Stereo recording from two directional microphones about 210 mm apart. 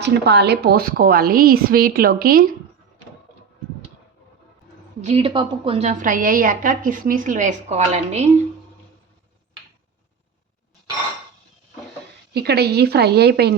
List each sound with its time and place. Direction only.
0.0 s a woman's voice: 50° right (ahead or behind)
4.9 s a woman's voice: 30° right (ahead or behind)
12.3 s a woman's voice: 50° right (ahead or behind)